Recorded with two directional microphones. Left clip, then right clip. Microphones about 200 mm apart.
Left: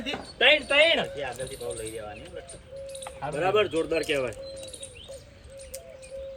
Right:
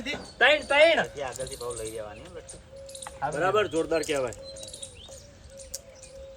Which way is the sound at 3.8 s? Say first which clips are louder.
Even; 55° right (ahead or behind).